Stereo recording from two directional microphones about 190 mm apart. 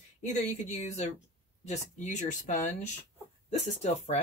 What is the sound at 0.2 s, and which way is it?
Speech, 40° left (ahead or behind).